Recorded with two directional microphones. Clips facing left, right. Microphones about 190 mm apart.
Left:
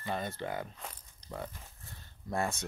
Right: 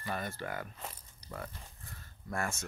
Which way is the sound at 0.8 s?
5° right (ahead or behind).